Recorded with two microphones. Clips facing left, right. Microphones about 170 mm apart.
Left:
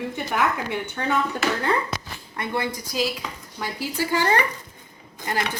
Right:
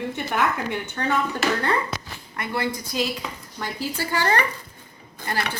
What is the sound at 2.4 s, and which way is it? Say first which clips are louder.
Speech: even; 15° left (ahead or behind).